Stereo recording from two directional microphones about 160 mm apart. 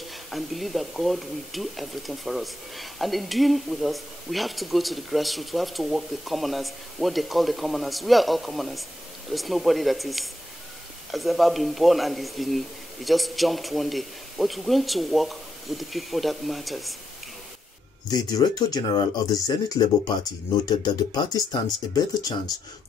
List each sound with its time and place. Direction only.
0.3 s speech: centre (ahead or behind)
18.1 s speech: 25° left (ahead or behind)